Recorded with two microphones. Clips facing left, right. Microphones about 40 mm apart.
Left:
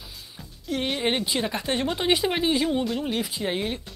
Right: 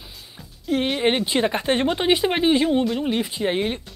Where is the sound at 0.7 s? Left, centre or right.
Centre.